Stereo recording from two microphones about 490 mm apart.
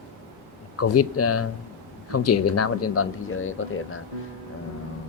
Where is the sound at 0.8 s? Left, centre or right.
Left.